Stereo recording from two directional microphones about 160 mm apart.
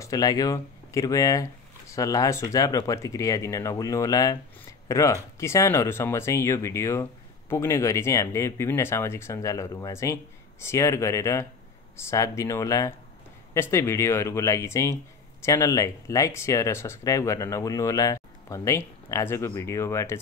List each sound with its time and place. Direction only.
0.0 s speech: 20° left (ahead or behind)